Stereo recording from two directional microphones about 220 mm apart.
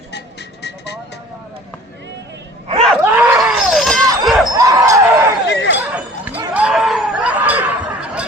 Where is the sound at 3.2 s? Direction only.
5° right (ahead or behind).